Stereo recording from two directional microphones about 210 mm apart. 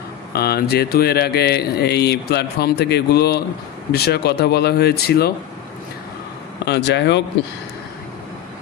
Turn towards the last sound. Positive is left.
turn(degrees=55)  # may be behind; listen again after turning